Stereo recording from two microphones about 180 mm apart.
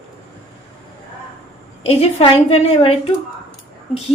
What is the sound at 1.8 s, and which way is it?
A woman's voice, 35° left (ahead or behind).